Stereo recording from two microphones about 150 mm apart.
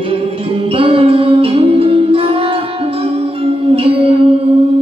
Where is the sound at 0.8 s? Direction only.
40° right (ahead or behind).